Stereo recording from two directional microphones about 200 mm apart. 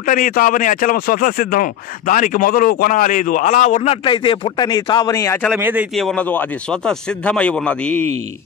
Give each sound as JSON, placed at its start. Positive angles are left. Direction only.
{"t": 0.0, "sound": "speech", "side_deg": 40}
{"t": 5.6, "sound": "speech", "side_deg": -10}
{"t": 5.9, "sound": "speech", "side_deg": 5}